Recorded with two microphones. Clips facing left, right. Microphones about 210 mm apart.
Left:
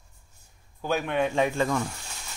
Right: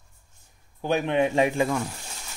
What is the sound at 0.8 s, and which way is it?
Speech, 20° right (ahead or behind).